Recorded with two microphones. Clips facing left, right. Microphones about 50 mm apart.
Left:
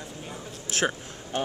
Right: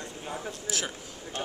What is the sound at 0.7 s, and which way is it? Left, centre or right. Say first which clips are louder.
Speech: left 9 dB; left.